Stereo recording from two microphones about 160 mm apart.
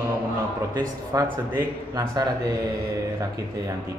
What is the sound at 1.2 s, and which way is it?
Speech, 20° right (ahead or behind).